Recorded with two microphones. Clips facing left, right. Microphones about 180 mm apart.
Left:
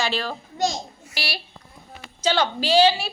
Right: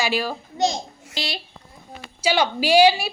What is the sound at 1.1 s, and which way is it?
A child's voice, 20° right (ahead or behind).